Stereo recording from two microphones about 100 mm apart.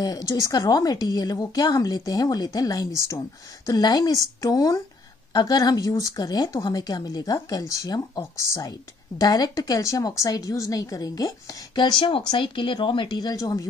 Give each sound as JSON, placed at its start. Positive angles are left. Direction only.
{"t": 0.0, "sound": "speech", "side_deg": 35}
{"t": 9.2, "sound": "speech", "side_deg": 40}